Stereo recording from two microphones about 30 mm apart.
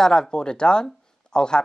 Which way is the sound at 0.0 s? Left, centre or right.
Left.